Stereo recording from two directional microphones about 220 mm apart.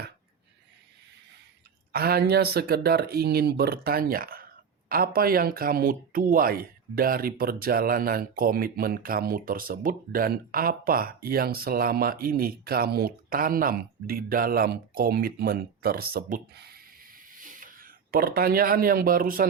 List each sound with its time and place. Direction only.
1.9 s speech: 45° right (ahead or behind)